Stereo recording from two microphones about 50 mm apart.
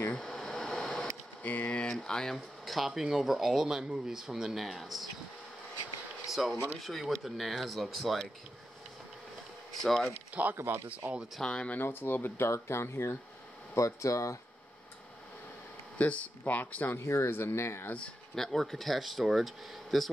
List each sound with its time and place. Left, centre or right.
0.1 s a sound: centre
1.4 s speech: left
1.8 s speech: centre
6.3 s speech: centre
9.8 s speech: centre
10.3 s speech: right
11.4 s speech: left
11.8 s speech: left
12.4 s speech: left
13.7 s speech: left
16.0 s speech: left
17.0 s speech: left
18.3 s speech: centre